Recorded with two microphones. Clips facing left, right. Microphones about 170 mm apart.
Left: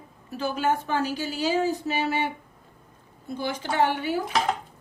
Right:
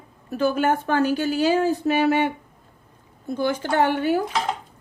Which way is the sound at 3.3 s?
50° right (ahead or behind).